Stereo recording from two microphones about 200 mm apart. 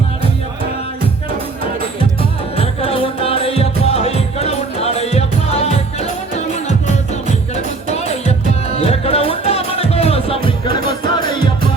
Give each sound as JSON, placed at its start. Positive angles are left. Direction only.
{"t": 2.6, "sound": "music", "side_deg": 30}